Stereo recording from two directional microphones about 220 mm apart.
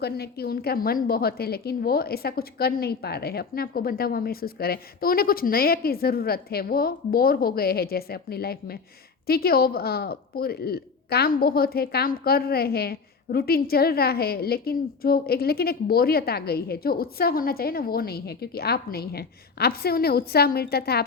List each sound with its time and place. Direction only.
0.0 s a woman's voice: 45° left (ahead or behind)